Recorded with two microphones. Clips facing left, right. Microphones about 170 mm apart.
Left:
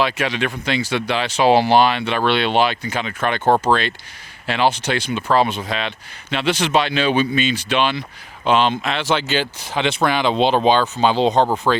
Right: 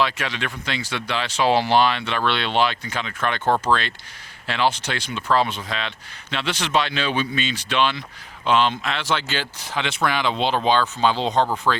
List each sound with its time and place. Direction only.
0.0 s speech: 15° left (ahead or behind)
3.4 s speech: 35° left (ahead or behind)
3.7 s speech: 15° left (ahead or behind)